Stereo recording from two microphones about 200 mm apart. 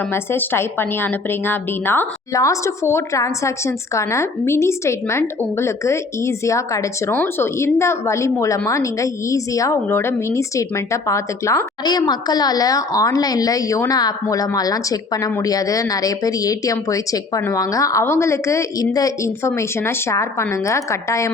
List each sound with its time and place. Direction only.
0.1 s a woman's voice: 10° left (ahead or behind)